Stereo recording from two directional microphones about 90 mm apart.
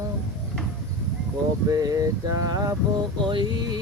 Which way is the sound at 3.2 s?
60° right (ahead or behind).